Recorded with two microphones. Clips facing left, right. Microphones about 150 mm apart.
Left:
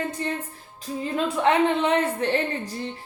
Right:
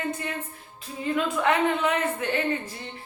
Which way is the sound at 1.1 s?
30° left (ahead or behind).